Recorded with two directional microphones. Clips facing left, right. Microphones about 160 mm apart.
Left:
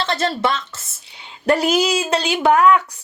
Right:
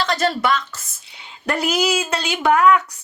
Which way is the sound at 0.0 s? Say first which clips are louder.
Even; 30° left (ahead or behind).